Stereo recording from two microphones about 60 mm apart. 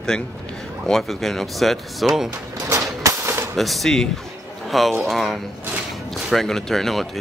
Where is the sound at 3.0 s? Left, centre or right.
Right.